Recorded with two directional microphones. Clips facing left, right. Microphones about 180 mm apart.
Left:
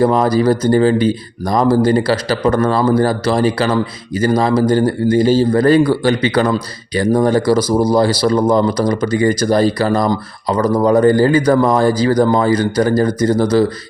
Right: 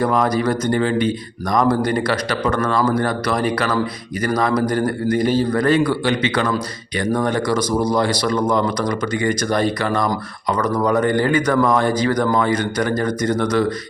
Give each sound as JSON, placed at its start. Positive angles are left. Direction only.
{"t": 0.0, "sound": "a man's voice", "side_deg": 30}